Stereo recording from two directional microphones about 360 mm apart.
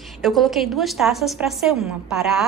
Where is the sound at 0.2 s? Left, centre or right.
Centre.